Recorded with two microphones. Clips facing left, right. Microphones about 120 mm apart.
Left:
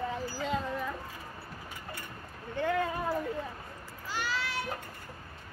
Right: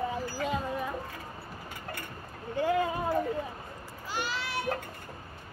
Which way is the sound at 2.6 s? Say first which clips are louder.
Right 3 dB; 15° right (ahead or behind).